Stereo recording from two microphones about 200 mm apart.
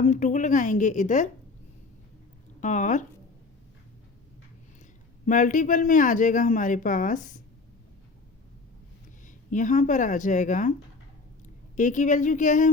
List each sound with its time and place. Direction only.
0.0 s a man's voice: 40° left (ahead or behind)
2.6 s a man's voice: 40° left (ahead or behind)
5.2 s a man's voice: 40° left (ahead or behind)
9.2 s speech: 40° left (ahead or behind)
11.8 s a man's voice: 40° left (ahead or behind)